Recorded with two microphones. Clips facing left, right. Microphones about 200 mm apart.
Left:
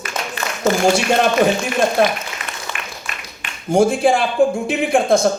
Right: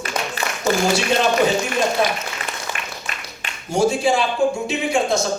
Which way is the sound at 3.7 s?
55° left (ahead or behind).